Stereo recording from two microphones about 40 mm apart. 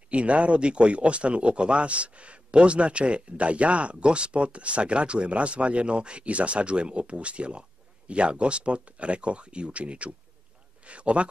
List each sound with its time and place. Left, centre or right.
0.1 s speech: right